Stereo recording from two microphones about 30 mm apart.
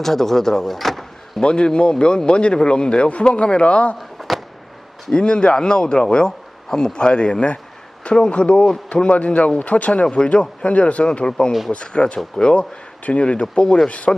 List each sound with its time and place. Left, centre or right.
0.0 s speech: centre
0.7 s power windows: centre
1.4 s speech: left
4.2 s a sound: centre
5.1 s speech: left
9.0 s speech: left